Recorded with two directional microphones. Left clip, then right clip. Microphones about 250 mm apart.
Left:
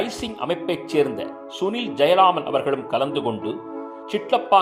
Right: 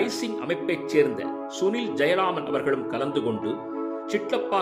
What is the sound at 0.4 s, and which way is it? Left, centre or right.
A man's voice, centre.